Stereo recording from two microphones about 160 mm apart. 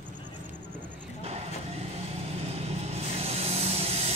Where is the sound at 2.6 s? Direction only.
40° right (ahead or behind).